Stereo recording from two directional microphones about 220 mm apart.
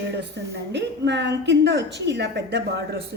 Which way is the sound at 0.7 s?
50° right (ahead or behind).